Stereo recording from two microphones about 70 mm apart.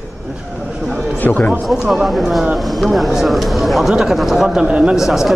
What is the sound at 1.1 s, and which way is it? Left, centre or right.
Speech, left.